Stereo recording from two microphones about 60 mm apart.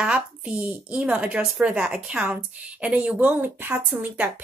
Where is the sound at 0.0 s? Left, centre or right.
Centre.